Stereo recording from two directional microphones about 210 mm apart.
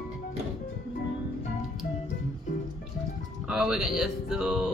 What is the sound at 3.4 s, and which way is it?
Speech, centre (ahead or behind).